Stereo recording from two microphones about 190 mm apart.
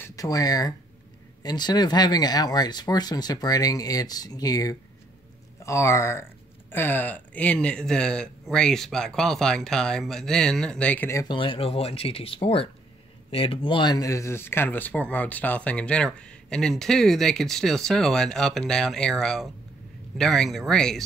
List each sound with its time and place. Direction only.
0.0 s speech: 20° left (ahead or behind)
11.3 s speech: 25° left (ahead or behind); by 21.0 s centre (ahead or behind)